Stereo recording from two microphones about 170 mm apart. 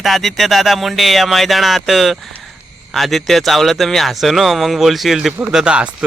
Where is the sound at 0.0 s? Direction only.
Centre (ahead or behind).